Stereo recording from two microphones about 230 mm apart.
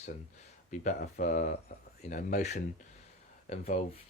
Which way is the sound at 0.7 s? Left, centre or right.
Left.